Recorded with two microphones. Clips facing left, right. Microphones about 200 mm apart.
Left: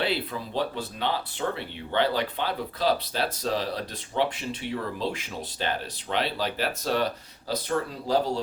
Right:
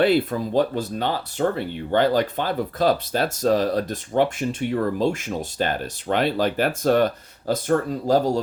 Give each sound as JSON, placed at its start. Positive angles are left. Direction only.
{"t": 0.0, "sound": "speech", "side_deg": -45}